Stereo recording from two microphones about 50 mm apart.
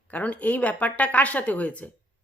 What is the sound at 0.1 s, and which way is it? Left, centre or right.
Speech, left.